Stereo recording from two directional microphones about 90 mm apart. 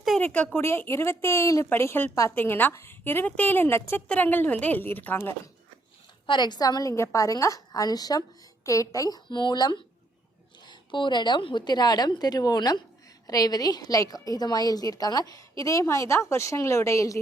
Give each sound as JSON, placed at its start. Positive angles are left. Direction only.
{"t": 0.2, "sound": "speech", "side_deg": 15}
{"t": 0.6, "sound": "a woman's voice", "side_deg": 30}
{"t": 6.2, "sound": "a woman's voice", "side_deg": 55}
{"t": 6.9, "sound": "a woman's voice", "side_deg": 35}